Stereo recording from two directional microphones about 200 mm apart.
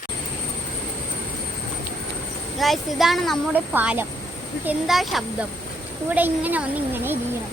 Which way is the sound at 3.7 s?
10° right (ahead or behind).